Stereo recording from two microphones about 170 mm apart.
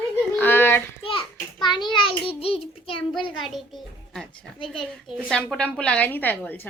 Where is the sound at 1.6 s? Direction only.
25° left (ahead or behind).